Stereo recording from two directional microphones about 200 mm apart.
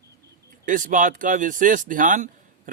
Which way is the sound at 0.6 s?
40° right (ahead or behind).